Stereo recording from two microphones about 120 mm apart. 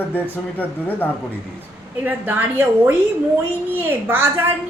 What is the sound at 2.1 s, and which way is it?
A woman's voice, 15° right (ahead or behind).